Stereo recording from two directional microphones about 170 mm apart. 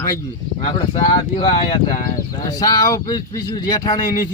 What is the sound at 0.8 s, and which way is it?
A man's voice, 30° left (ahead or behind).